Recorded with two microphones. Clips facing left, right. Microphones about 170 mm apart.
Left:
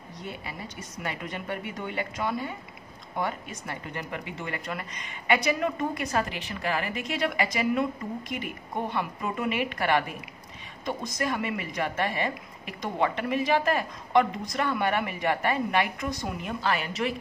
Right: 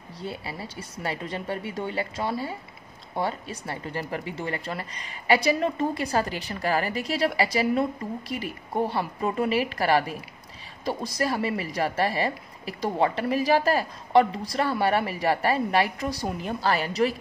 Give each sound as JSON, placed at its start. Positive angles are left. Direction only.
{"t": 0.2, "sound": "speech", "side_deg": -30}